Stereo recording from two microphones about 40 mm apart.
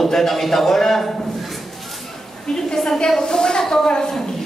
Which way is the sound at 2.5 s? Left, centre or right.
Centre.